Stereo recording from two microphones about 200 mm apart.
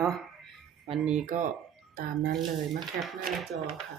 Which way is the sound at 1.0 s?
35° right (ahead or behind).